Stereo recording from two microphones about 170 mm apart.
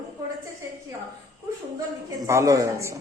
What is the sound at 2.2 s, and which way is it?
Speech, 15° right (ahead or behind).